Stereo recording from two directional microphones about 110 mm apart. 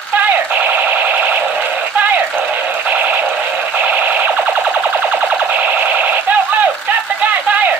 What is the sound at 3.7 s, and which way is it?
Car alarm, 15° right (ahead or behind).